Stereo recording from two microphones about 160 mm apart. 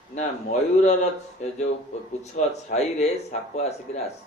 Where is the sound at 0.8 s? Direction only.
45° left (ahead or behind).